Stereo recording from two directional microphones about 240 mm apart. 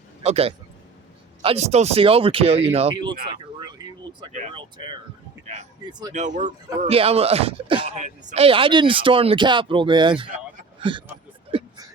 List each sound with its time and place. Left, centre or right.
0.2 s speech: right
3.6 s a sound: centre
4.3 s speech: right
5.8 s speech: centre
6.1 s speech: right
10.8 s a sound: right